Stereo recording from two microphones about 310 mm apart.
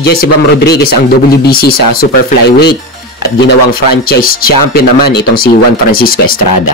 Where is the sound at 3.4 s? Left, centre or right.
Left.